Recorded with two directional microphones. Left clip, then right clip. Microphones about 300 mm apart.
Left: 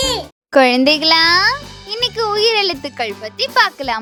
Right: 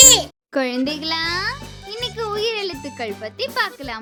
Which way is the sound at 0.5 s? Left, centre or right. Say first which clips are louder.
Left 11 dB; left.